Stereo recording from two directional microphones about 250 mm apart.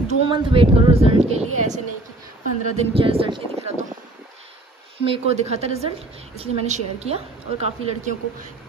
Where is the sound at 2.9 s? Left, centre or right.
Right.